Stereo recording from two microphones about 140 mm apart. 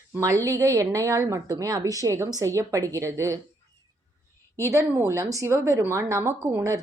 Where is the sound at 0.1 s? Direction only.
25° right (ahead or behind).